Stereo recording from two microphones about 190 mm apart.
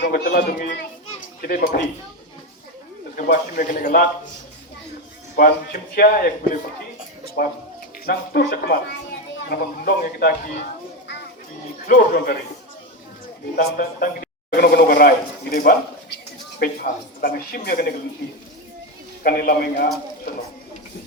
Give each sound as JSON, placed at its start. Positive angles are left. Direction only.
{"t": 0.1, "sound": "a man's voice", "side_deg": 55}
{"t": 3.2, "sound": "a man's voice", "side_deg": 45}
{"t": 6.0, "sound": "a man's voice", "side_deg": 45}
{"t": 7.4, "sound": "a man's voice", "side_deg": 55}
{"t": 11.9, "sound": "a man's voice", "side_deg": 50}
{"t": 13.6, "sound": "a man's voice", "side_deg": 50}
{"t": 19.2, "sound": "a man's voice", "side_deg": 50}